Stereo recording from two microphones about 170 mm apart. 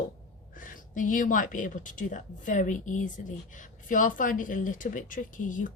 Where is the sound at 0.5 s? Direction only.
55° left (ahead or behind).